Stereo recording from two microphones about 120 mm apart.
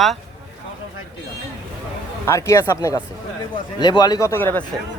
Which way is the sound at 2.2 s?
25° left (ahead or behind).